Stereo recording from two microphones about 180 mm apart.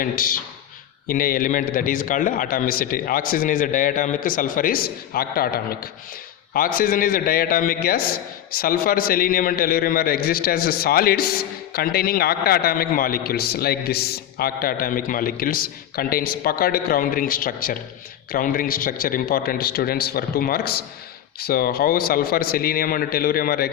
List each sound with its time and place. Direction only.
0.0 s a man's voice: 50° left (ahead or behind)